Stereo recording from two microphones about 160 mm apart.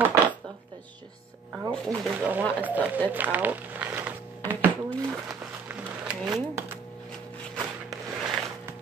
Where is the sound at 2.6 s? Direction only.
10° right (ahead or behind).